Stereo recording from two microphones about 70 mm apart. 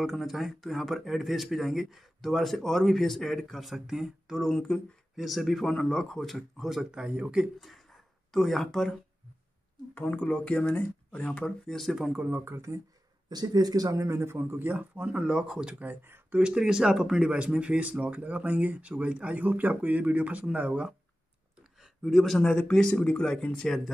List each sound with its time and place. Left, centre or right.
0.0 s speech: centre
8.3 s speech: centre
9.9 s speech: left; by 12.1 s centre
12.3 s speech: right
13.3 s speech: right; by 15.7 s centre
15.8 s speech: right
16.3 s speech: centre
22.0 s speech: centre